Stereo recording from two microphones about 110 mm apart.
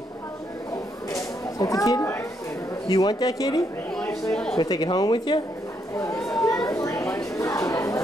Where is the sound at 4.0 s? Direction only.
5° left (ahead or behind).